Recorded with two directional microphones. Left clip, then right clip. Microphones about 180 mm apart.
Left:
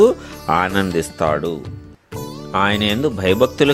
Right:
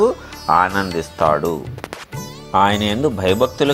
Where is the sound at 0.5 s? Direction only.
40° left (ahead or behind).